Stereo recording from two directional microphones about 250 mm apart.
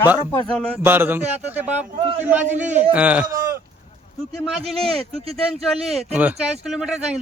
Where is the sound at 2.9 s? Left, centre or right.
Centre.